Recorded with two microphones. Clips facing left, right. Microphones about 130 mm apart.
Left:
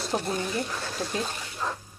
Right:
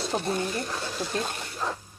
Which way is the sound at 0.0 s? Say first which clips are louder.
Right 1 dB; centre (ahead or behind).